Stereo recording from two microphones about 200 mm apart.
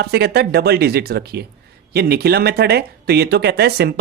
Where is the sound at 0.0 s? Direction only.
55° right (ahead or behind).